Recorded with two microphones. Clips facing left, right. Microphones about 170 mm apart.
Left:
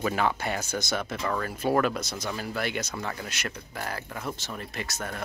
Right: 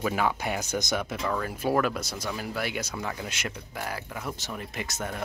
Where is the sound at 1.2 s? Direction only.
Centre (ahead or behind).